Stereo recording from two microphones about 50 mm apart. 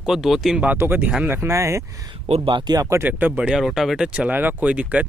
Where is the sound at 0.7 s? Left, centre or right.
Right.